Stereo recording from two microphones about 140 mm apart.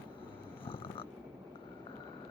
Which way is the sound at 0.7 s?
40° left (ahead or behind).